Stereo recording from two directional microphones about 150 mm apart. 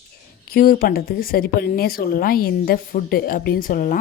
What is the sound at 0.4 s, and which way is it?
Speech, 75° left (ahead or behind).